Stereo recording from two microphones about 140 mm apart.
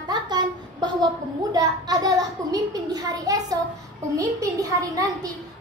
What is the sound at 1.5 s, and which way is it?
A woman's voice, 30° right (ahead or behind).